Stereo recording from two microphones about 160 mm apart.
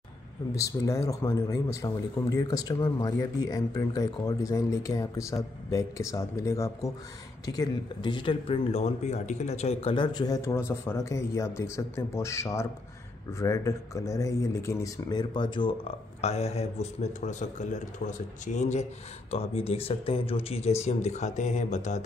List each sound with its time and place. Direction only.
0.6 s speech: 20° left (ahead or behind); by 22.0 s 50° left (ahead or behind)